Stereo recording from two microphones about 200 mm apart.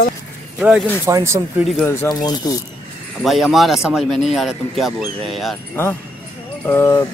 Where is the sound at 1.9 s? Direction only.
15° left (ahead or behind).